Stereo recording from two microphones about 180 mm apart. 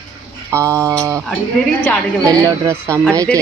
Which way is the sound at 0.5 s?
15° right (ahead or behind).